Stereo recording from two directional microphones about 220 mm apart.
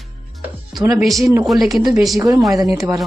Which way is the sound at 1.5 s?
Centre (ahead or behind).